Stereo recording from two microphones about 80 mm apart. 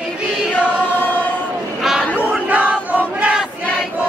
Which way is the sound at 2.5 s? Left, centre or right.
Centre.